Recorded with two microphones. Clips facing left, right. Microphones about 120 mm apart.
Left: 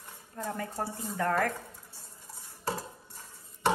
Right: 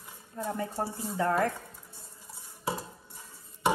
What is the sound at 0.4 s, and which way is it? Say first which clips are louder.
Speech: right 2 dB; 25° right (ahead or behind).